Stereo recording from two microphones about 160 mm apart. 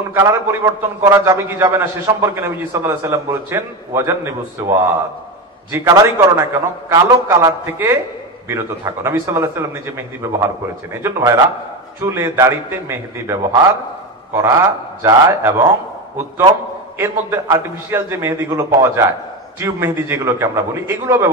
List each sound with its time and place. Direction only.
0.1 s a man's voice: 15° right (ahead or behind)
17.0 s a man's voice: 15° right (ahead or behind)